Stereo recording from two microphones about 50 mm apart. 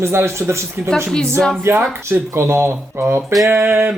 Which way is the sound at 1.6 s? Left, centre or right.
Right.